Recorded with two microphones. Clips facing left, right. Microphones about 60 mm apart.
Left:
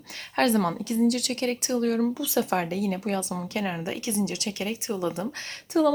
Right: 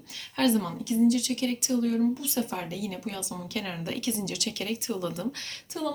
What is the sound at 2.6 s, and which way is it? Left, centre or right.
Speech, left.